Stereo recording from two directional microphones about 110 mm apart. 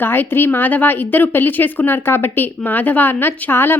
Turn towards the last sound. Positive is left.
turn(degrees=20)  # may be behind; listen again after turning